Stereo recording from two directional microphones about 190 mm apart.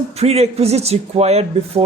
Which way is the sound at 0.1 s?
35° right (ahead or behind).